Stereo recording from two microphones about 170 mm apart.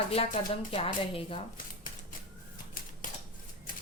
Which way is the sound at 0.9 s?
30° left (ahead or behind).